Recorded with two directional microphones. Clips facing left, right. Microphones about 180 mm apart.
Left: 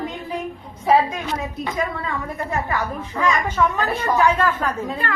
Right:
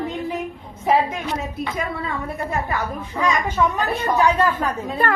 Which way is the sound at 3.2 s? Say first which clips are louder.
Even; 15° right (ahead or behind).